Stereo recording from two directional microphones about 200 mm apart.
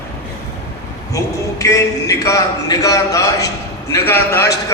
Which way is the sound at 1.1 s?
15° left (ahead or behind).